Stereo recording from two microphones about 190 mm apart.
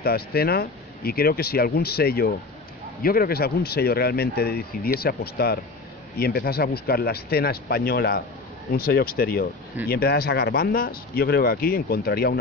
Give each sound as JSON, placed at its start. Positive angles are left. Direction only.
{"t": 0.0, "sound": "speech", "side_deg": 55}